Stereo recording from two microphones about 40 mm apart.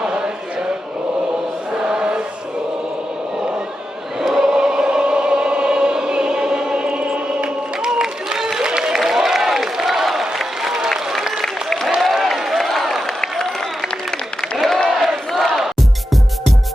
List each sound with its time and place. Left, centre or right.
0.0 s chant: right
1.8 s chant: centre
4.2 s choir: centre
8.0 s a sound: centre
10.8 s applause: centre
11.4 s applause: centre
11.9 s a sound: centre
14.5 s a sound: centre
14.9 s crowd: centre